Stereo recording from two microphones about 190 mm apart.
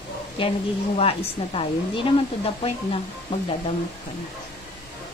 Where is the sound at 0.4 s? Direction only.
25° left (ahead or behind).